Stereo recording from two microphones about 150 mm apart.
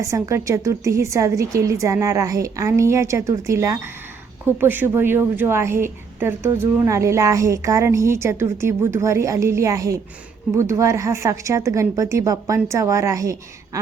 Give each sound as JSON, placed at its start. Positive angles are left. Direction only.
{"t": 0.0, "sound": "a woman's voice", "side_deg": -20}